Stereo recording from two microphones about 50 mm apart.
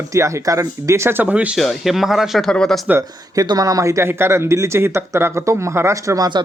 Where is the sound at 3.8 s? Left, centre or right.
Right.